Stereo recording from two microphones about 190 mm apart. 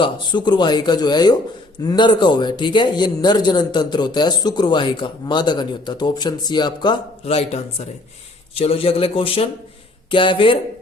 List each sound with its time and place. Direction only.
0.0 s a man's voice: 25° left (ahead or behind)